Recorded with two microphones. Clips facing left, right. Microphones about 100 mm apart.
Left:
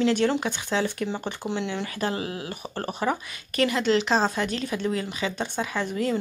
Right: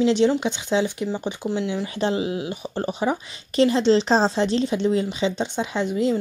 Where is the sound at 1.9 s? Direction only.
20° right (ahead or behind).